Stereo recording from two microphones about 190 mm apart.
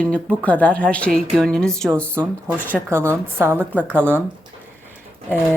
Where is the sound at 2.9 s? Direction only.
15° right (ahead or behind).